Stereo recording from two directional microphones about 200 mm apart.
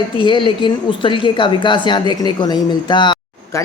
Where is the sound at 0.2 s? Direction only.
25° left (ahead or behind).